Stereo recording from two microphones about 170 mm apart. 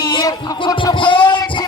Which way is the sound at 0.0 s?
20° left (ahead or behind).